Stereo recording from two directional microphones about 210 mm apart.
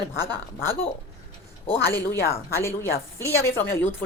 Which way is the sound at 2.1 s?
10° left (ahead or behind).